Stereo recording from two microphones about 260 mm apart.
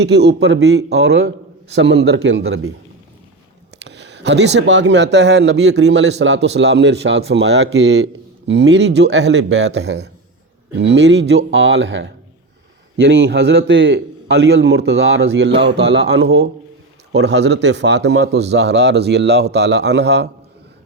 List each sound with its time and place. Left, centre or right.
0.0 s speech: right
3.8 s speech: right